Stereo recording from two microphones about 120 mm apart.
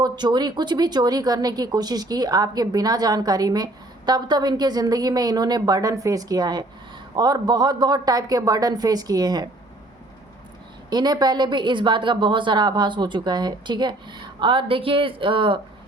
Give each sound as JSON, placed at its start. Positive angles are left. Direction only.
{"t": 0.0, "sound": "speech", "side_deg": -35}
{"t": 10.8, "sound": "speech", "side_deg": -35}